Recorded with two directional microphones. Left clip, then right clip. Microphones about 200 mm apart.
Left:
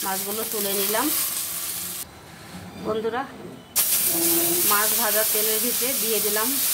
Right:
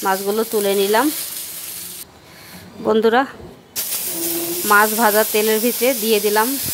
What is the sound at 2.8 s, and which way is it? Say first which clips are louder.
Speech: right 11 dB; 55° right (ahead or behind).